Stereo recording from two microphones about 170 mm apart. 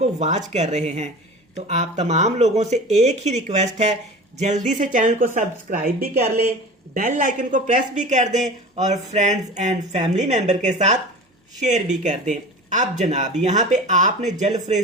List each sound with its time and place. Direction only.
0.0 s speech: 40° right (ahead or behind)